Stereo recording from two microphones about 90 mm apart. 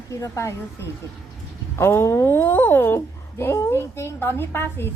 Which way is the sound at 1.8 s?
30° left (ahead or behind).